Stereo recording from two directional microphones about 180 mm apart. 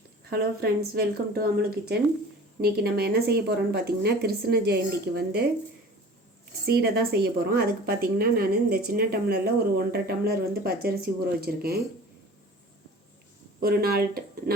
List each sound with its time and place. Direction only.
0.3 s a woman's voice: 60° right (ahead or behind)
6.7 s a woman's voice: 60° right (ahead or behind)
13.6 s a woman's voice: 60° right (ahead or behind)